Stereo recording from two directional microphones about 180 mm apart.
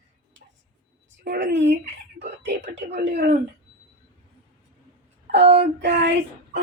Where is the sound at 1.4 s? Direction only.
85° right.